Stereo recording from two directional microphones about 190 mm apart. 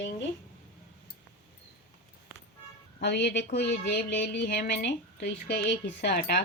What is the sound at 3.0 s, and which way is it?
Speech, 65° left (ahead or behind).